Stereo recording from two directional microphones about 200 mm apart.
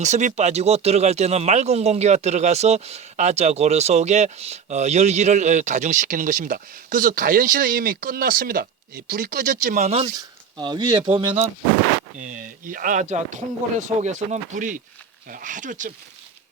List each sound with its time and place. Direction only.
0.0 s speech: 35° right (ahead or behind)
10.2 s speech: 20° right (ahead or behind)
12.2 s speech: 40° right (ahead or behind)